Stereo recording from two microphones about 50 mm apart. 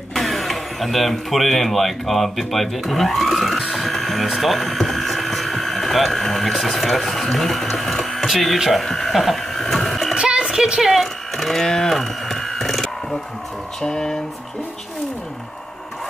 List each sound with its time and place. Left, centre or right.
0.1 s speech: centre
8.8 s sheep: centre
10.1 s music: centre
10.5 s a sound: centre